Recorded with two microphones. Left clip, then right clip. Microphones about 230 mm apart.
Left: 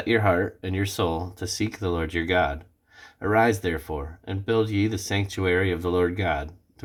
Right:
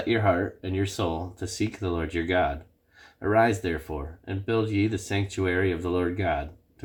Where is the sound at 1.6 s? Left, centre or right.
Left.